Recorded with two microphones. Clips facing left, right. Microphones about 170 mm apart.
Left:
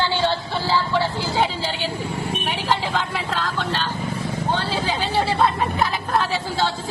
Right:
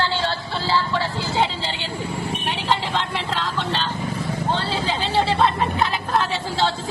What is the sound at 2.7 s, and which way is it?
Vehicle, centre (ahead or behind).